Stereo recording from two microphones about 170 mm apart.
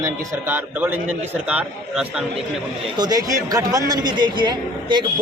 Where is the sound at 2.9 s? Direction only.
20° right (ahead or behind).